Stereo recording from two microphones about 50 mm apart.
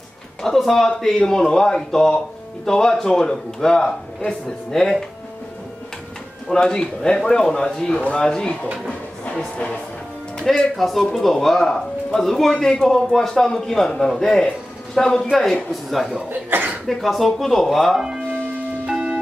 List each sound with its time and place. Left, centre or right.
0.4 s speech: centre
6.5 s speech: centre
8.0 s speech: left
8.3 s speech: centre
10.6 s speech: centre
15.7 s speech: centre
16.3 s speech: right
16.8 s speech: centre
18.9 s music: centre